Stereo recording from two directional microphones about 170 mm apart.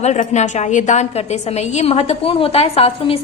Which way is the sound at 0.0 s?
40° left (ahead or behind).